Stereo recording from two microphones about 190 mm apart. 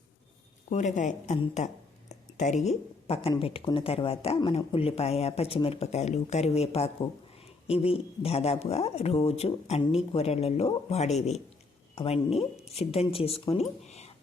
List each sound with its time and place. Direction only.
0.7 s speech: 40° left (ahead or behind)